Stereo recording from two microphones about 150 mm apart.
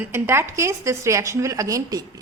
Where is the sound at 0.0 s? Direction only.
15° right (ahead or behind).